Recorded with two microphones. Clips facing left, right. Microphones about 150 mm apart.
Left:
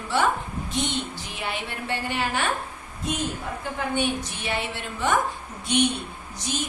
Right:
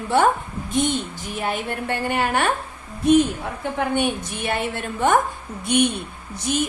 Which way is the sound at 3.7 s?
55° right (ahead or behind).